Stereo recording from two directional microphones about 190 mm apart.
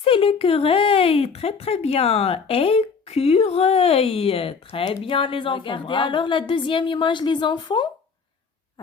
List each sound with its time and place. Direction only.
0.0 s speech: 30° left (ahead or behind)